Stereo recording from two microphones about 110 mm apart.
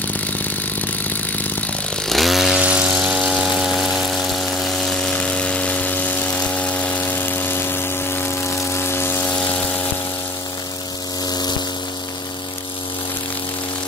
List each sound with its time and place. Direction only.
2.0 s chainsaw: centre (ahead or behind)
4.4 s vehicle: 5° left (ahead or behind)
11.2 s pump: 40° left (ahead or behind)